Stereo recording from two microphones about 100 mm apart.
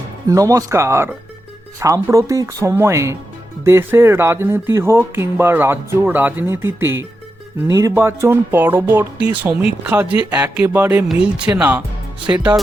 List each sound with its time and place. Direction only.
0.3 s speech: 35° right (ahead or behind); by 12.5 s 10° right (ahead or behind)